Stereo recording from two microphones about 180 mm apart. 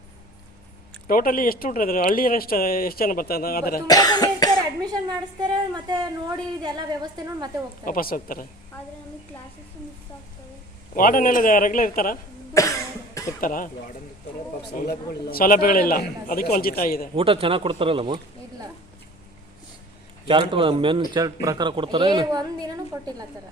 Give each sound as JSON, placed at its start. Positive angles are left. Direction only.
{"t": 1.0, "sound": "speech", "side_deg": 50}
{"t": 3.8, "sound": "cough", "side_deg": 20}
{"t": 4.8, "sound": "a woman's voice", "side_deg": -20}
{"t": 7.9, "sound": "speech", "side_deg": 50}
{"t": 10.9, "sound": "speech", "side_deg": 50}
{"t": 12.6, "sound": "cough", "side_deg": 15}
{"t": 13.4, "sound": "speech", "side_deg": 50}
{"t": 17.2, "sound": "speech", "side_deg": -30}
{"t": 20.2, "sound": "a woman's voice", "side_deg": -30}